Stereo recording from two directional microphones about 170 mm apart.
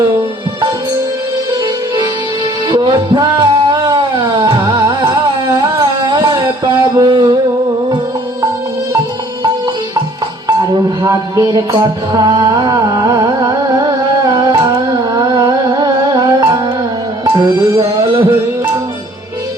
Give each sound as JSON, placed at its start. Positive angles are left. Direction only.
{"t": 2.6, "sound": "music", "side_deg": -25}
{"t": 11.0, "sound": "music", "side_deg": -20}